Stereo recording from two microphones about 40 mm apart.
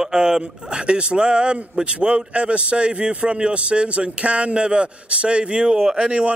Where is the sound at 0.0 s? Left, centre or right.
Centre.